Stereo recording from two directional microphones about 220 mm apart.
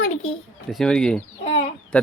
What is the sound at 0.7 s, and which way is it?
Speech, centre (ahead or behind).